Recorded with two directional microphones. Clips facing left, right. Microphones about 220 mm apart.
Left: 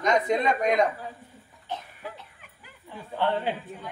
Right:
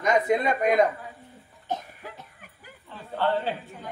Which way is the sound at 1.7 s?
45° right (ahead or behind).